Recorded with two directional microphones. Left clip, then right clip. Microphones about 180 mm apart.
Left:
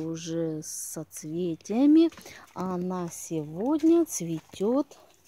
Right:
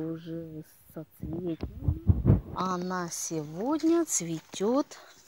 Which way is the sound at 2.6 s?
15° left (ahead or behind).